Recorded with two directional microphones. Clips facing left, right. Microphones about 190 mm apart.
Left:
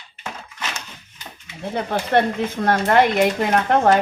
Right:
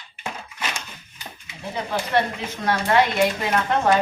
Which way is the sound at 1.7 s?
55° left (ahead or behind).